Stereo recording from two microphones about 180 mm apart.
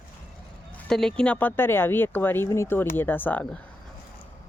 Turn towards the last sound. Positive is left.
turn(degrees=10)  # may be behind; listen again after turning